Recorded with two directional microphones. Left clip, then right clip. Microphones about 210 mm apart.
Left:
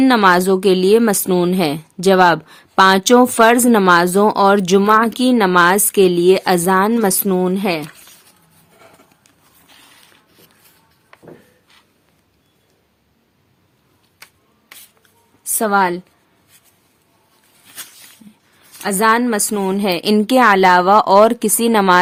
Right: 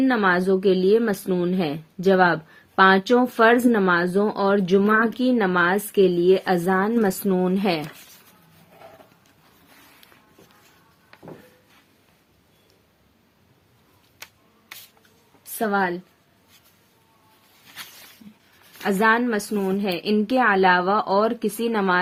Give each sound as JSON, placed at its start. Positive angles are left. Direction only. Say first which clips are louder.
{"t": 0.0, "sound": "a woman's voice", "louder": "left 8 dB", "side_deg": 35}
{"t": 15.5, "sound": "a woman's voice", "louder": "left 8 dB", "side_deg": 35}
{"t": 18.8, "sound": "a woman's voice", "louder": "left 5 dB", "side_deg": 20}